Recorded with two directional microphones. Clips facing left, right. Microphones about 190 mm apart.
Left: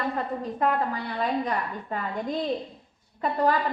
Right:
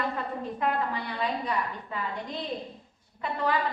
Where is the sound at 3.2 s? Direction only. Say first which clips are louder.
Left 6 dB; 45° left (ahead or behind).